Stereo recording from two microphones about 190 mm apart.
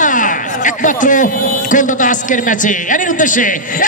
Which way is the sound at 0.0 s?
45° left (ahead or behind).